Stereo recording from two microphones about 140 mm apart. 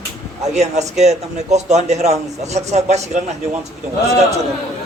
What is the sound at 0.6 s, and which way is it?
A man's voice, 55° right (ahead or behind).